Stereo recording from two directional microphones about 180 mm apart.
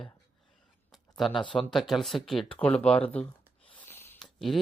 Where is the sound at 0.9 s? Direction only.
Centre (ahead or behind).